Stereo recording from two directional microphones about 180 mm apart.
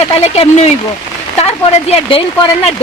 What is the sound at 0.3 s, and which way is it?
Speech, 35° left (ahead or behind).